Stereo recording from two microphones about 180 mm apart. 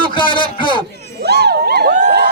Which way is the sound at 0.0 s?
25° left (ahead or behind).